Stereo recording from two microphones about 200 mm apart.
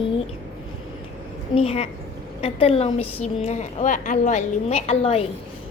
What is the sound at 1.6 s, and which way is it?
A woman's voice, 30° left (ahead or behind).